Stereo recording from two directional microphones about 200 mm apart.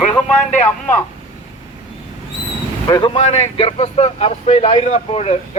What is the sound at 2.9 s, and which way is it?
A man's voice, 20° left (ahead or behind).